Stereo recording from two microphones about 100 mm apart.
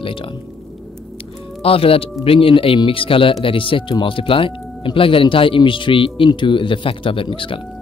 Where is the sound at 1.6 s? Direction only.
70° left (ahead or behind).